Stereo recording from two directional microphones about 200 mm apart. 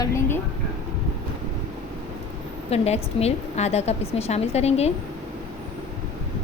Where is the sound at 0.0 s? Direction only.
15° left (ahead or behind).